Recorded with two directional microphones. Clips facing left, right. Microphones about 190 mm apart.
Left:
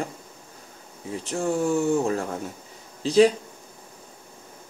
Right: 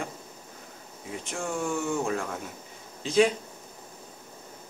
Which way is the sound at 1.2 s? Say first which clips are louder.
Left 7 dB; 35° left (ahead or behind).